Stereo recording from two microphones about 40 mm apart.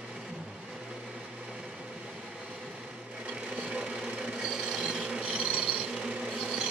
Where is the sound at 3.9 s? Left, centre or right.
Right.